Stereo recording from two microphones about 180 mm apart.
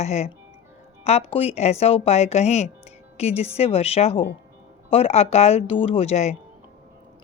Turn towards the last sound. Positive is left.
turn(degrees=40)  # may be behind; listen again after turning